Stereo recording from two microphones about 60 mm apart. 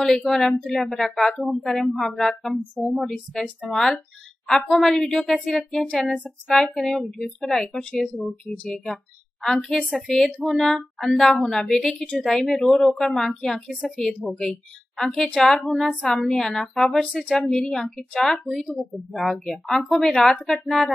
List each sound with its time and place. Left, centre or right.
0.0 s a woman's voice: centre
5.3 s a woman's voice: centre
9.4 s a woman's voice: centre